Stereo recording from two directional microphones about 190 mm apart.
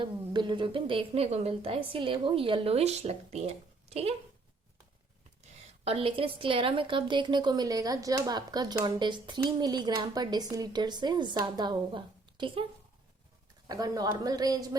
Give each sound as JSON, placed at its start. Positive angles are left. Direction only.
{"t": 0.0, "sound": "a woman's voice", "side_deg": -25}
{"t": 5.8, "sound": "a woman's voice", "side_deg": -30}
{"t": 13.7, "sound": "a woman's voice", "side_deg": -20}